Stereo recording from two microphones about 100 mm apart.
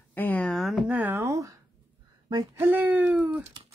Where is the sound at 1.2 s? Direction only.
35° right (ahead or behind).